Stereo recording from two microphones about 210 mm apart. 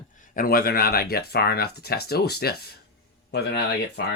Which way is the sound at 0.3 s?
45° left (ahead or behind).